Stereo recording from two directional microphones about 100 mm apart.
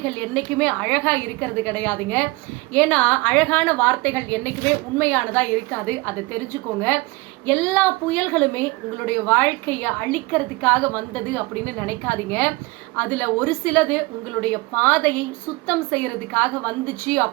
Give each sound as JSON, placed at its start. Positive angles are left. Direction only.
{"t": 0.0, "sound": "a woman's voice", "side_deg": 15}